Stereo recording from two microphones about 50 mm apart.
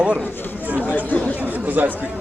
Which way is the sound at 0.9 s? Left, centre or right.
Left.